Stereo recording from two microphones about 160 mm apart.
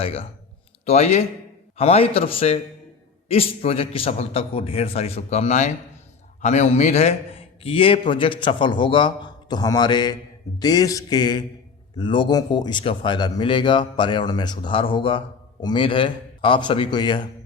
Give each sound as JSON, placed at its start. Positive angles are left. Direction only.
{"t": 0.0, "sound": "a man's voice", "side_deg": 40}